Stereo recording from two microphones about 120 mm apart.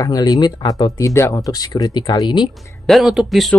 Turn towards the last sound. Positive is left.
turn(degrees=0)  # may be behind; listen again after turning